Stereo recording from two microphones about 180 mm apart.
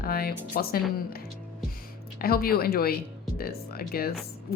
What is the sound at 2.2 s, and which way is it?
Speech, 60° left (ahead or behind).